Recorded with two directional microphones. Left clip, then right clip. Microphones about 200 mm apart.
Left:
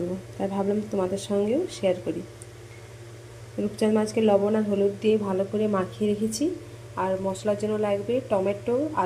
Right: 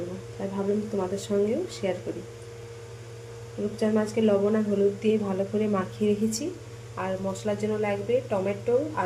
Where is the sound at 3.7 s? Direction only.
25° left (ahead or behind).